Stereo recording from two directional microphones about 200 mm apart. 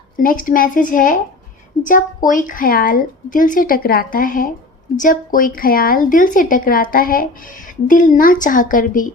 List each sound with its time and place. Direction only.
0.2 s a woman's voice: 45° left (ahead or behind)